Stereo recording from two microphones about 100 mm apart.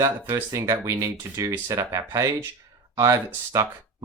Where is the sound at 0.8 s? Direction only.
30° right (ahead or behind).